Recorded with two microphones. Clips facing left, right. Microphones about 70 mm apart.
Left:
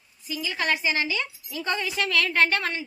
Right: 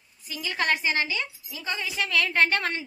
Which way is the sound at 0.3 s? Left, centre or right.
Right.